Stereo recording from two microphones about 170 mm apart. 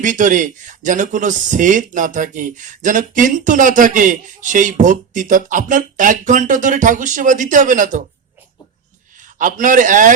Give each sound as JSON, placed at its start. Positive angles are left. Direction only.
{"t": 0.0, "sound": "speech", "side_deg": -50}
{"t": 9.1, "sound": "a man's voice", "side_deg": -50}